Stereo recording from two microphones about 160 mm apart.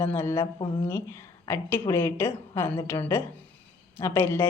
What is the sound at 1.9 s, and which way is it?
A woman's voice, 15° left (ahead or behind).